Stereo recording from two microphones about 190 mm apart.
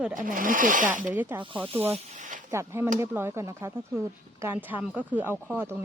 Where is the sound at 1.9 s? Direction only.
40° right (ahead or behind).